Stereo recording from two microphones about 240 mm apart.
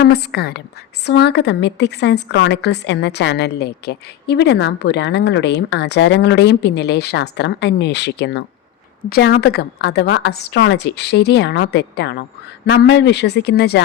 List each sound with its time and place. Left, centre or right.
0.0 s a woman's voice: left